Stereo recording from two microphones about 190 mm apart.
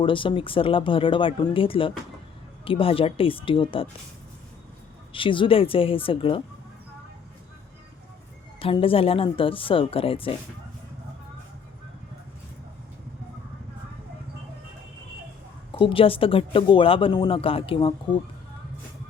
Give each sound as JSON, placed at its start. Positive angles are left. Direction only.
{"t": 0.0, "sound": "speech", "side_deg": 25}
{"t": 5.1, "sound": "speech", "side_deg": 25}
{"t": 8.5, "sound": "speech", "side_deg": 30}
{"t": 15.7, "sound": "speech", "side_deg": 30}